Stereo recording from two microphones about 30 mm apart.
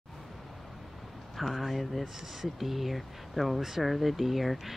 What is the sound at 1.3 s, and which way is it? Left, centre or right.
Speech, centre.